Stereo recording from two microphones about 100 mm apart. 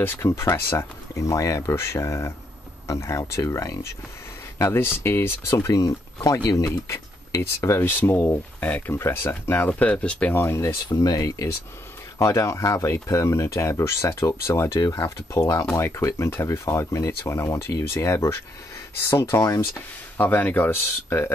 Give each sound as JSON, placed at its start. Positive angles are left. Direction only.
{"t": 0.0, "sound": "speech", "side_deg": 25}
{"t": 5.6, "sound": "speech", "side_deg": 35}
{"t": 10.3, "sound": "speech", "side_deg": 25}
{"t": 10.9, "sound": "speech", "side_deg": 40}
{"t": 20.2, "sound": "speech", "side_deg": 20}